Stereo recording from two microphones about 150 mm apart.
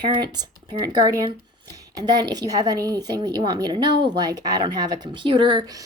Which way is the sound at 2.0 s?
25° right (ahead or behind).